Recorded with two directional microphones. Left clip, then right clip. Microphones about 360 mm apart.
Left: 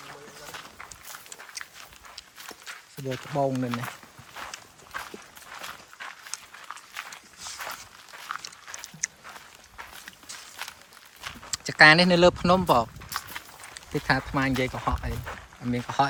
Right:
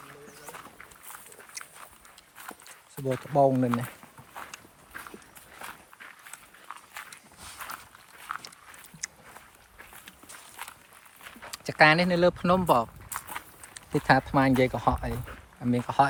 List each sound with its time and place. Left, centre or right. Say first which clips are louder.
1.6 s walk: left 3 dB; centre
3.1 s speech: right 4 dB; centre
9.0 s a sound: left 6 dB; centre
11.5 s speech: left 4 dB; centre